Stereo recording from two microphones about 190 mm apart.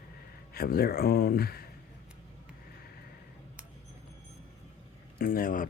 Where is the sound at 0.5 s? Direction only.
50° left (ahead or behind).